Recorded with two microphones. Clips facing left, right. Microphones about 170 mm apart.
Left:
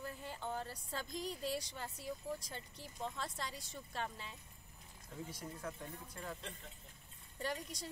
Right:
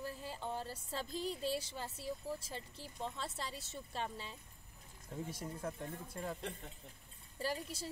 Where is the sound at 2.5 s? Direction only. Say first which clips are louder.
Right 2 dB; 30° right (ahead or behind).